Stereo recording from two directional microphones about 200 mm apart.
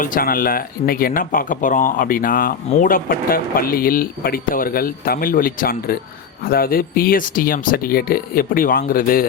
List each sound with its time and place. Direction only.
0.0 s speech: 45° left (ahead or behind)